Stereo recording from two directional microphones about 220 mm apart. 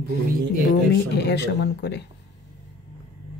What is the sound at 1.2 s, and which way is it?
Speech, 50° left (ahead or behind).